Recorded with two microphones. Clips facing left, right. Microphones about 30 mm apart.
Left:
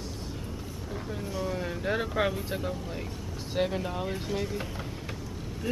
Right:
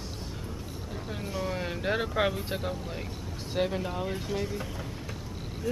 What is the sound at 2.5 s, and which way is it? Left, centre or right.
Speech, centre.